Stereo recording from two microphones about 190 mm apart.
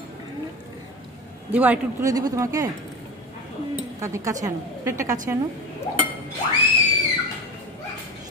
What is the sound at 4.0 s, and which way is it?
A woman's voice, 15° right (ahead or behind).